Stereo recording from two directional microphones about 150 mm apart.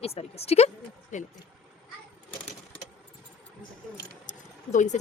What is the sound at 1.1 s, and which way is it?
Speech, 55° left (ahead or behind).